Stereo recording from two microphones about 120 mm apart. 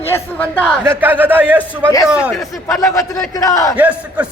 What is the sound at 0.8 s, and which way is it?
A man's voice, 20° right (ahead or behind).